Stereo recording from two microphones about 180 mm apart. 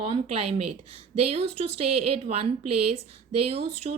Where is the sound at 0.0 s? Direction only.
35° right (ahead or behind).